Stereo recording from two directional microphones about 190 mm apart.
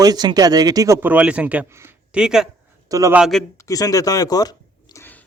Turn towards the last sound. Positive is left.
turn(degrees=15)  # may be behind; listen again after turning